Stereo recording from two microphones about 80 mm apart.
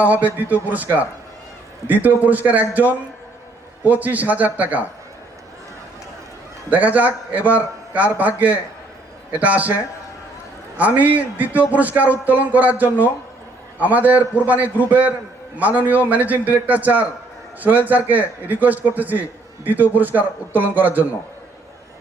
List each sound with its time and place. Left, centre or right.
0.0 s a man's voice: right
6.7 s a man's voice: centre
10.8 s a man's voice: right